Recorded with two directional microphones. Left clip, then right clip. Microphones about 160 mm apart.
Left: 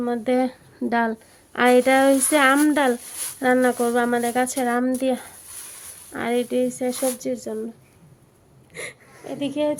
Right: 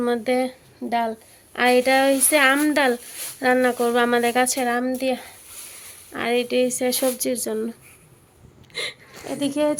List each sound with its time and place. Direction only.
0.3 s speech: 35° left (ahead or behind); by 7.6 s centre (ahead or behind)
8.7 s speech: 10° left (ahead or behind)